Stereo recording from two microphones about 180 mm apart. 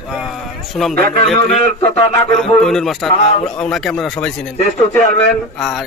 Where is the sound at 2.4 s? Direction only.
Centre (ahead or behind).